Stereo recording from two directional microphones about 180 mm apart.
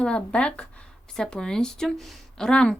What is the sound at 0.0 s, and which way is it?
Speech, 5° left (ahead or behind).